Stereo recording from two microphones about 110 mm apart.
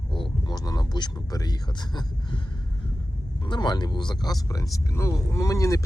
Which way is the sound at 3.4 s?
45° left (ahead or behind).